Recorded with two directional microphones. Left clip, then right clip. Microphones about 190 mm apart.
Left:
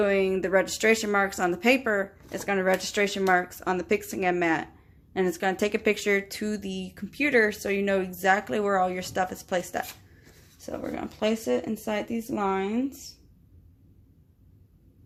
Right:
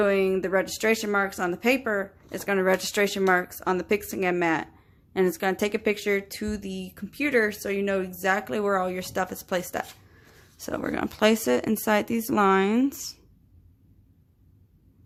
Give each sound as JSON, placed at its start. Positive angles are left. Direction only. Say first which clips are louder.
{"t": 0.0, "sound": "speech", "louder": "right 1 dB", "side_deg": -15}
{"t": 2.3, "sound": "speech", "louder": "right 2 dB", "side_deg": -15}
{"t": 10.7, "sound": "speech", "louder": "right 4 dB", "side_deg": -35}